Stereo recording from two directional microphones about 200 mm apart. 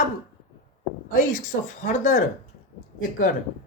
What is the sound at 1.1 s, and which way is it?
Speech, 40° left (ahead or behind).